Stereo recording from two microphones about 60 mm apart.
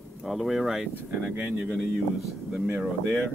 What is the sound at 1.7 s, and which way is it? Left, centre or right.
Speech, centre.